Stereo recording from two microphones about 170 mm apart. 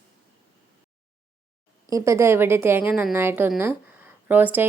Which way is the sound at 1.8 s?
20° right (ahead or behind).